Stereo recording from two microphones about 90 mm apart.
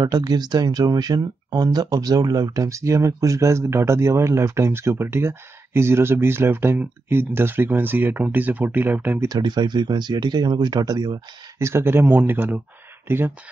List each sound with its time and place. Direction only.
0.0 s speech: 50° right (ahead or behind); by 9.3 s 20° right (ahead or behind)
9.3 s speech: 50° right (ahead or behind)
11.5 s speech: 30° right (ahead or behind)